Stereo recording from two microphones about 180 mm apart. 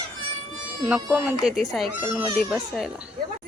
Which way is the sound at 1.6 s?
Centre (ahead or behind).